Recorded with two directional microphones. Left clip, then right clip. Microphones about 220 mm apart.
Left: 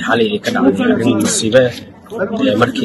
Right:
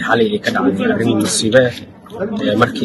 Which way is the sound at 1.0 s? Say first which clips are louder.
Left 1 dB; centre (ahead or behind).